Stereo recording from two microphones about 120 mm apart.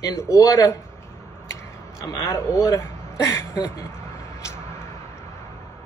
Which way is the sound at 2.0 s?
25° left (ahead or behind).